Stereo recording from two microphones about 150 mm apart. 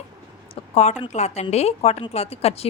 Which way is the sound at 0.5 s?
45° left (ahead or behind).